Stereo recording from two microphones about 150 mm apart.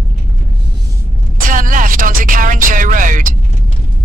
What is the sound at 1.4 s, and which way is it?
Music, 65° right (ahead or behind).